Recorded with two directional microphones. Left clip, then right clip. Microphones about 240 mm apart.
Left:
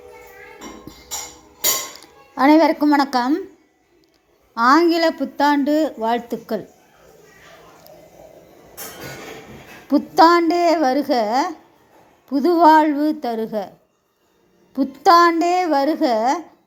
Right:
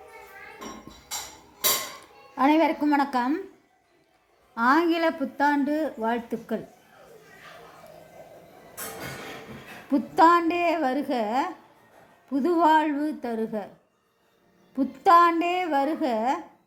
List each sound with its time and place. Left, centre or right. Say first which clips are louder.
0.9 s music: left 7 dB; centre
2.3 s a woman's voice: left 7 dB; left
4.5 s a woman's voice: left 7 dB; left
9.9 s a woman's voice: left 6 dB; centre
14.7 s a woman's voice: left 5 dB; left